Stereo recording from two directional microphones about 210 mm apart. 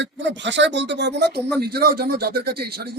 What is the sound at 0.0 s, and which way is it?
A man's voice, 60° right (ahead or behind).